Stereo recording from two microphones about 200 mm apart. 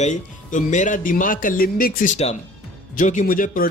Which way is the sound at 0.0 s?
35° left (ahead or behind).